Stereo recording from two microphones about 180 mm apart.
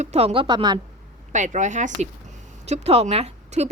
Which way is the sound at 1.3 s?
45° right (ahead or behind).